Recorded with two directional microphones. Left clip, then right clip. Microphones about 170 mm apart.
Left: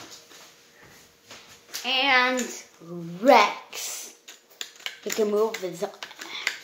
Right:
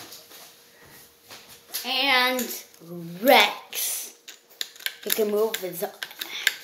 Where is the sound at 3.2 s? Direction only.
10° left (ahead or behind).